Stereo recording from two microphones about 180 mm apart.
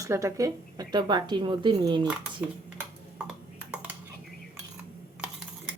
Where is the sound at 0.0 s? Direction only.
15° right (ahead or behind).